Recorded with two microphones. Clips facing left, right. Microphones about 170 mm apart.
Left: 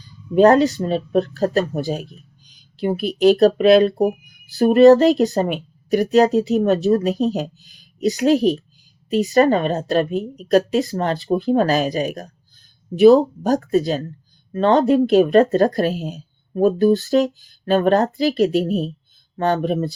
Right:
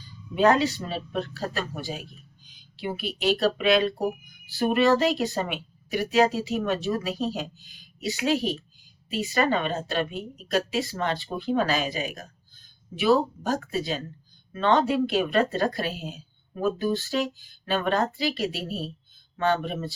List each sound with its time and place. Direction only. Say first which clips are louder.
0.3 s a woman's voice: left 8 dB; 40° left (ahead or behind)